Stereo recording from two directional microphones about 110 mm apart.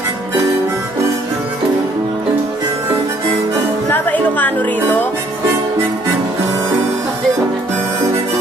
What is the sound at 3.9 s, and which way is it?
Music, 15° left (ahead or behind).